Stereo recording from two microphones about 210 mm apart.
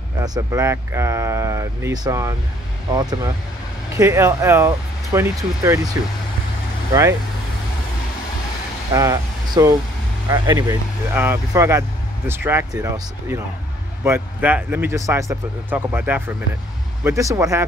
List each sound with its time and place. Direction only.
0.2 s speech: 15° right (ahead or behind)
6.9 s speech: 15° right (ahead or behind)
8.9 s speech: 15° right (ahead or behind)